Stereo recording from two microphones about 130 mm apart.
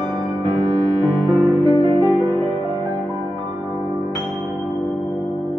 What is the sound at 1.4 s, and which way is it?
Music, 30° right (ahead or behind).